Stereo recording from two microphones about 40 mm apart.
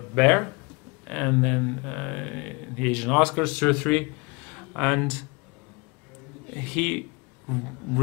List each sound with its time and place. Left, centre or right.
0.0 s speech: left
6.4 s a man's voice: centre